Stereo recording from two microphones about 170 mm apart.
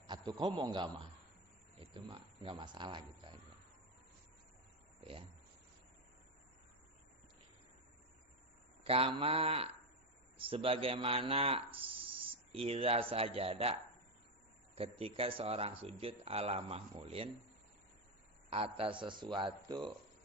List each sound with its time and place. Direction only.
0.1 s a man's voice: 25° right (ahead or behind)
4.9 s a sound: 35° right (ahead or behind)
8.8 s speech: 35° right (ahead or behind)
14.8 s speech: 35° right (ahead or behind)
18.5 s a man's voice: 35° right (ahead or behind)